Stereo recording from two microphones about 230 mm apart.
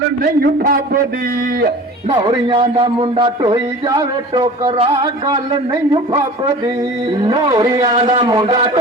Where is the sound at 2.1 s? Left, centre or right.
Right.